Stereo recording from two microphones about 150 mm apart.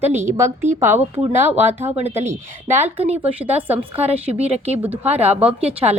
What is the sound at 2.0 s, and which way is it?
Speech, 45° right (ahead or behind).